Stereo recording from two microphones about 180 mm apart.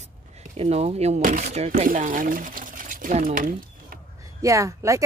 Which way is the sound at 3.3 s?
50° right (ahead or behind).